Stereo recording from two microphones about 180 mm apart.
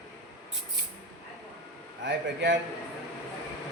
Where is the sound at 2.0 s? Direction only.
80° right.